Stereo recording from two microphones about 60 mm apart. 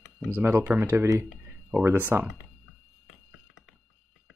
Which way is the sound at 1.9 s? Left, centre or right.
Right.